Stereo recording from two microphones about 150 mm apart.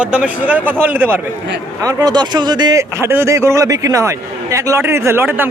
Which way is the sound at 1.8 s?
25° right (ahead or behind).